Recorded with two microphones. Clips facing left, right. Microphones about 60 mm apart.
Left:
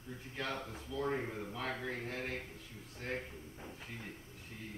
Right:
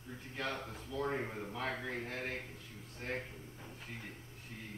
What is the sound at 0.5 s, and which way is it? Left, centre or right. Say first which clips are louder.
Speech: even; right.